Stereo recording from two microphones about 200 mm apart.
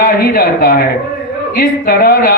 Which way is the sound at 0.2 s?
50° left (ahead or behind).